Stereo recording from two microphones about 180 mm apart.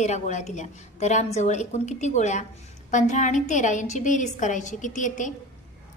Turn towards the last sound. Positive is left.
turn(degrees=45)  # may be behind; listen again after turning